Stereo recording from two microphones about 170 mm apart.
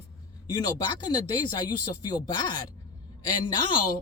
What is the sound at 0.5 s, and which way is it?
A man's voice, 25° left (ahead or behind).